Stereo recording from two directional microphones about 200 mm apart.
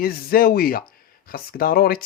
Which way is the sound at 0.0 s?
50° left (ahead or behind).